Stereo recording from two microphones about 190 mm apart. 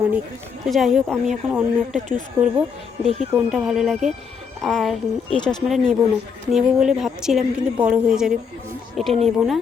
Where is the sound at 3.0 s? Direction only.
35° right (ahead or behind).